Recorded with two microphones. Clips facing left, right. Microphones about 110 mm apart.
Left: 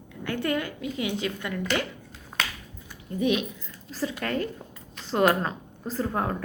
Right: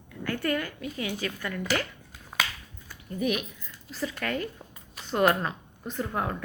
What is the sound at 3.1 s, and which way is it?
Speech, 25° left (ahead or behind).